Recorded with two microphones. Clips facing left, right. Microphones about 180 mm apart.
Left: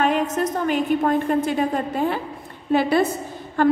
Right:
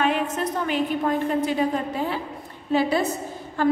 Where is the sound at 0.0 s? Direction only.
45° left (ahead or behind).